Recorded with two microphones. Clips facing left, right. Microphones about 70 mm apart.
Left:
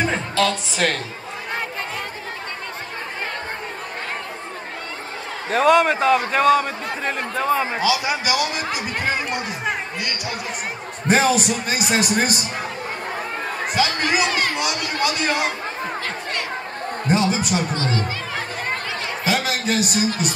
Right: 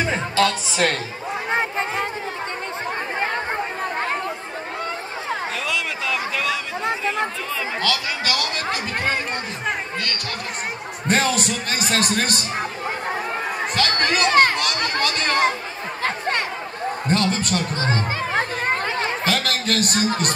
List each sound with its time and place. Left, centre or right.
0.0 s music: centre
1.5 s a sound: right
5.5 s a man's voice: left
7.8 s speech: centre
13.7 s speech: centre
14.3 s speech: right
15.0 s speech: centre
16.0 s chatter: right
17.1 s speech: centre
17.7 s chatter: right
19.2 s a man's voice: centre